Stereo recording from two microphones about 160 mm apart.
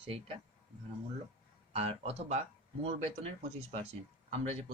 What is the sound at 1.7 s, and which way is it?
Speech, 35° right (ahead or behind).